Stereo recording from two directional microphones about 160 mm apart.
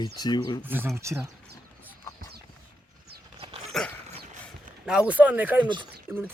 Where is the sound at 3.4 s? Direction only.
35° right (ahead or behind).